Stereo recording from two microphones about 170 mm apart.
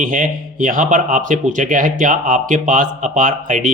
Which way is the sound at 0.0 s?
50° right (ahead or behind).